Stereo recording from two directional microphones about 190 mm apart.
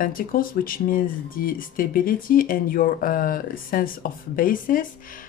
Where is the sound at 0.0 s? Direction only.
50° left (ahead or behind).